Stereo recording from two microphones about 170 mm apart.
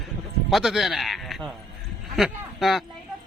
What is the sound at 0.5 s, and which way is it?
Speech, centre (ahead or behind).